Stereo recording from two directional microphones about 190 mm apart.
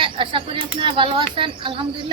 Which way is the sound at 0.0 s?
25° right (ahead or behind).